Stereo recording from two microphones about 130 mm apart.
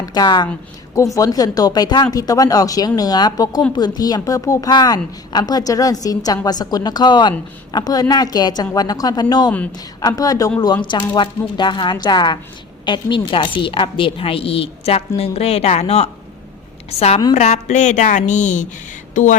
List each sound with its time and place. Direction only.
0.0 s a woman's voice: 30° left (ahead or behind); by 16.0 s 55° left (ahead or behind)
17.3 s speech: 65° left (ahead or behind)